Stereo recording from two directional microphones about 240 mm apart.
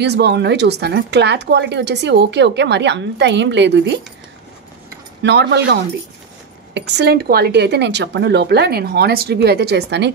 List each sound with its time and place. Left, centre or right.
0.0 s speech: right
5.2 s speech: right